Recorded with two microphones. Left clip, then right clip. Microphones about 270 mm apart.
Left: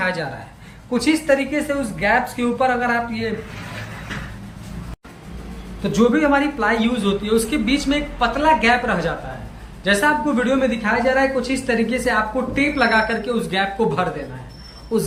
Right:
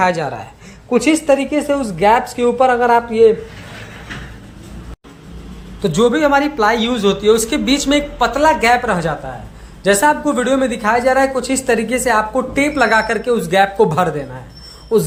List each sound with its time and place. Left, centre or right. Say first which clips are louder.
0.0 s speech: right 7 dB; centre
5.8 s a man's voice: right 4 dB; right